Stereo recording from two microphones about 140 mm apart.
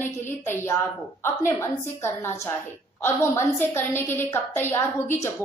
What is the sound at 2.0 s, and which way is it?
A woman's voice, 15° left (ahead or behind).